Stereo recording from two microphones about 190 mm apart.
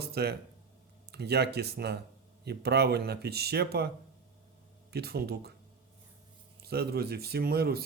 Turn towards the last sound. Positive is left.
turn(degrees=-55)  # may be behind; listen again after turning